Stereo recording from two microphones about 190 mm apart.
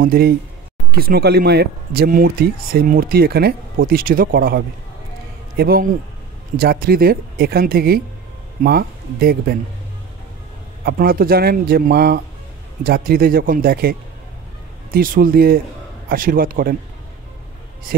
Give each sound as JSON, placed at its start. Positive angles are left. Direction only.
{"t": 0.0, "sound": "speech", "side_deg": -50}
{"t": 10.8, "sound": "speech", "side_deg": -50}